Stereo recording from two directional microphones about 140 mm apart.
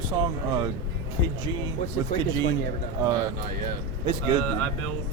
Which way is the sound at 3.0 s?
30° right (ahead or behind).